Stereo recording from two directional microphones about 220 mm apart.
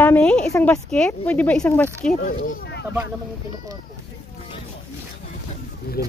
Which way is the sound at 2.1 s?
50° left (ahead or behind).